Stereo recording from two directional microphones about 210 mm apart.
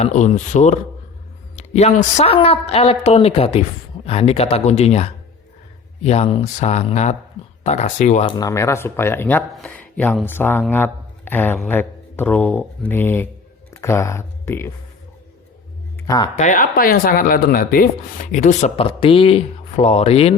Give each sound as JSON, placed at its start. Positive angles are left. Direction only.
{"t": 0.0, "sound": "a woman's voice", "side_deg": 30}
{"t": 8.3, "sound": "speech", "side_deg": 15}
{"t": 16.0, "sound": "a sound", "side_deg": 15}
{"t": 16.4, "sound": "speech", "side_deg": 40}
{"t": 18.9, "sound": "a woman's voice", "side_deg": 25}